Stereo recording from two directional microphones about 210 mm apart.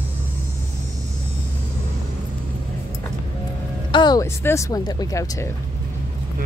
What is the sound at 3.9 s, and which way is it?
Speech, 20° left (ahead or behind).